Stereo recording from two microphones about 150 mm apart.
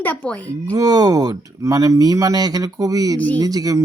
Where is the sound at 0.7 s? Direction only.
25° right (ahead or behind).